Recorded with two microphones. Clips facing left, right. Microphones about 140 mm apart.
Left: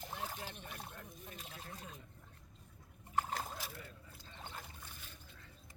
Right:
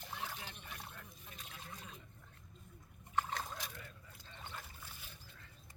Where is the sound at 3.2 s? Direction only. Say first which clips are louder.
Left 1 dB; 35° left (ahead or behind).